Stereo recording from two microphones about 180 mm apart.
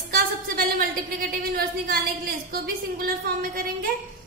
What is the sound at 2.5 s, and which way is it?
Speech, 55° right (ahead or behind).